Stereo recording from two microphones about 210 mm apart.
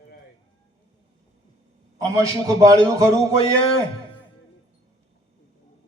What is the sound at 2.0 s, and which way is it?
A man's voice, 15° right (ahead or behind).